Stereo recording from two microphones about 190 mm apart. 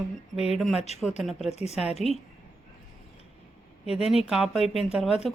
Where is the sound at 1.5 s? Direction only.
35° left (ahead or behind).